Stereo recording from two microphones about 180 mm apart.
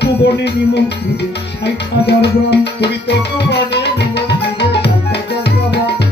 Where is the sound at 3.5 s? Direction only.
65° left (ahead or behind).